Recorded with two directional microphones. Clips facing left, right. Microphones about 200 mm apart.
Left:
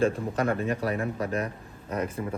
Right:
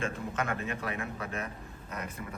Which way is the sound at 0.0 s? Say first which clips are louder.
Left 9 dB; 35° left (ahead or behind).